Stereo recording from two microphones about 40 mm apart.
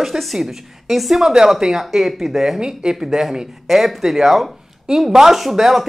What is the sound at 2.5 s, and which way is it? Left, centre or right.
Speech, centre.